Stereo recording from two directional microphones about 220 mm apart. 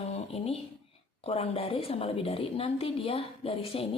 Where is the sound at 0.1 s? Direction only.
25° left (ahead or behind).